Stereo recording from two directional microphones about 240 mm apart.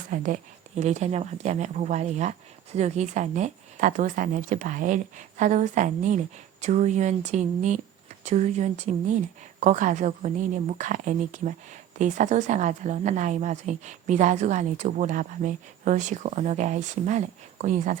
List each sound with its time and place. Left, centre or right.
0.1 s a woman's voice: right